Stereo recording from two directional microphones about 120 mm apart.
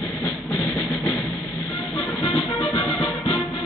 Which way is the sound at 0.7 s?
10° left (ahead or behind).